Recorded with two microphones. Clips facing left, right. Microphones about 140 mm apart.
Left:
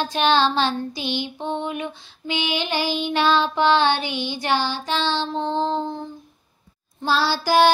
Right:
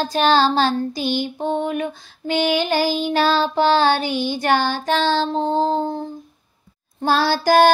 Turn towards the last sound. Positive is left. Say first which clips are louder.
# right 3 dB
turn(degrees=-50)  # may be behind; listen again after turning